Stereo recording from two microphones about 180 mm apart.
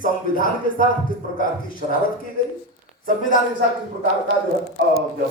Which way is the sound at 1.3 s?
50° left (ahead or behind).